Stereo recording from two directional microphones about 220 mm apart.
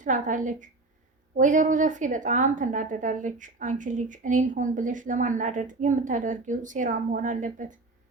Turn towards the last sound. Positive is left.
turn(degrees=-35)  # may be behind; listen again after turning